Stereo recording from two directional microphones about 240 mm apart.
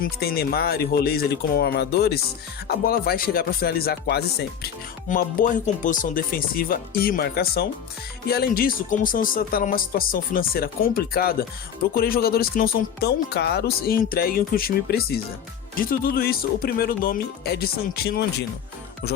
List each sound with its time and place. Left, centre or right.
0.0 s speech: left